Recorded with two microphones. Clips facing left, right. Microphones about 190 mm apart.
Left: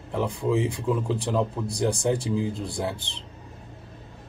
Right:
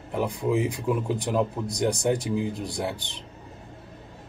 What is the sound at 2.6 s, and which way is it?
Speech, 15° right (ahead or behind).